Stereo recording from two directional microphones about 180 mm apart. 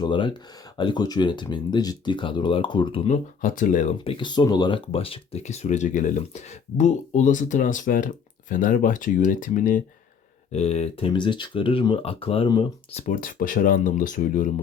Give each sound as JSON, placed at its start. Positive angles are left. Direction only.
{"t": 0.0, "sound": "speech", "side_deg": 25}
{"t": 3.4, "sound": "speech", "side_deg": 45}
{"t": 4.0, "sound": "speech", "side_deg": 30}
{"t": 10.5, "sound": "speech", "side_deg": 35}
{"t": 13.1, "sound": "speech", "side_deg": 50}